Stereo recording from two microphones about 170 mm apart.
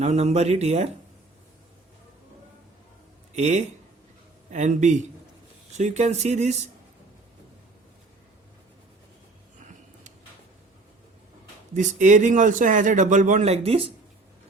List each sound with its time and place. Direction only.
0.0 s speech: 40° right (ahead or behind)
3.3 s a man's voice: 45° right (ahead or behind)
9.6 s a sound: 45° right (ahead or behind)
11.7 s a man's voice: 50° right (ahead or behind)